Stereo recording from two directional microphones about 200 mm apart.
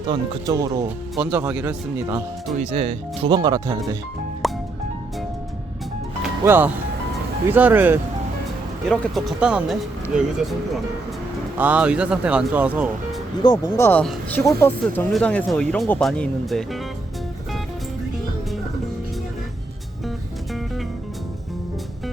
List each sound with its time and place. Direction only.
0.1 s speech: 20° right (ahead or behind)
2.6 s speech: 30° right (ahead or behind)
4.4 s music: centre (ahead or behind)
6.4 s speech: 10° right (ahead or behind)
11.5 s speech: 5° right (ahead or behind)
13.4 s speech: 15° left (ahead or behind)
20.1 s music: centre (ahead or behind)